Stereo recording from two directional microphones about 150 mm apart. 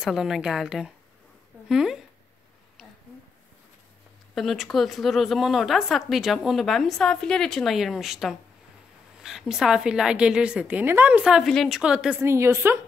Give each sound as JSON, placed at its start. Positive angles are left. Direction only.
{"t": 0.0, "sound": "a woman's voice", "side_deg": 0}
{"t": 4.4, "sound": "a woman's voice", "side_deg": 0}
{"t": 12.2, "sound": "a woman's voice", "side_deg": -20}